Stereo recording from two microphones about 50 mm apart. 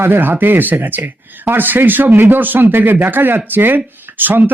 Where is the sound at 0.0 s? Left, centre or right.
Right.